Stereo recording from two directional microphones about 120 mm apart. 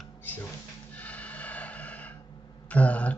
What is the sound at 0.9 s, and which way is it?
Snort, 10° left (ahead or behind).